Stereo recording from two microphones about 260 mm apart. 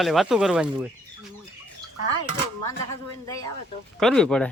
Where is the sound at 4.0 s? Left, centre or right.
Centre.